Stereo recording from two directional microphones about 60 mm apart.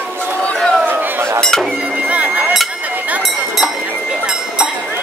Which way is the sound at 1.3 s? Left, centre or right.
Centre.